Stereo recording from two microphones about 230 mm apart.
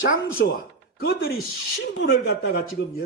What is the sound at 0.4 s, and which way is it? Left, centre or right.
Speech, left.